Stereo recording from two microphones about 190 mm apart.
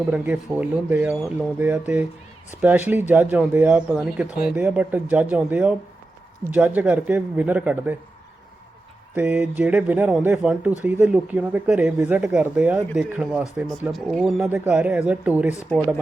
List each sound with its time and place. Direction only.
0.0 s speech: 5° right (ahead or behind)
9.1 s speech: 10° right (ahead or behind)
14.3 s speech: 10° right (ahead or behind)